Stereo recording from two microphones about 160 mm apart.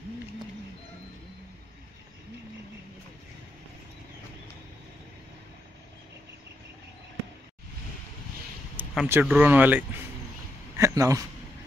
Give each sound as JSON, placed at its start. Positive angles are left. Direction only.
{"t": 8.9, "sound": "a man's voice", "side_deg": -5}